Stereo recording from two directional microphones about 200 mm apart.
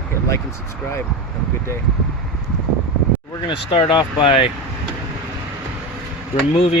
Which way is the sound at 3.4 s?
25° left (ahead or behind).